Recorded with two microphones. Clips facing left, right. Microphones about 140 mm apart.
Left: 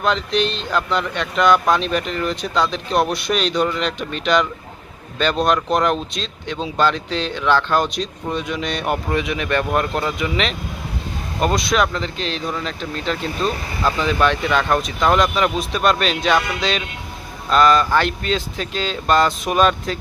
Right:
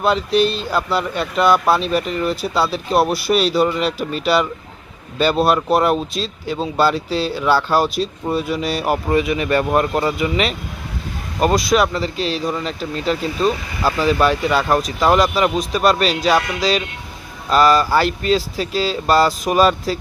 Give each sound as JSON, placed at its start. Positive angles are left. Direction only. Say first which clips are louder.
{"t": 0.0, "sound": "speech", "louder": "right 3 dB", "side_deg": -5}